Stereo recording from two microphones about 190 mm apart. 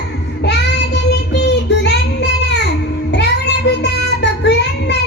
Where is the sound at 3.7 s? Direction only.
60° left (ahead or behind).